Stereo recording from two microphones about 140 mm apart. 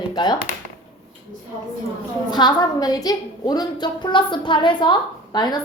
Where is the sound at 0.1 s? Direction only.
30° left (ahead or behind).